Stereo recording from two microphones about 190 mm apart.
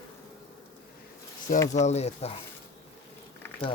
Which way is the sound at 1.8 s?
35° left (ahead or behind).